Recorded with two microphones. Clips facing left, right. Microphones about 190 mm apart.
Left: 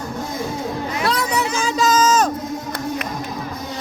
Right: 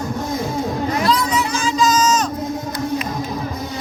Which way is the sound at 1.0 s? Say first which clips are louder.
Left 1 dB; 65° left (ahead or behind).